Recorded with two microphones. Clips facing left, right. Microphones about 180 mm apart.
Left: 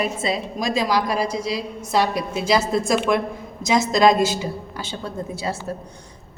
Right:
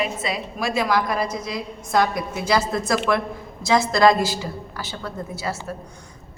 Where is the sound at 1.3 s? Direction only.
90° left.